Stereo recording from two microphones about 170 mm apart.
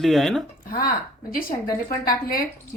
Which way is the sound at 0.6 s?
60° left (ahead or behind).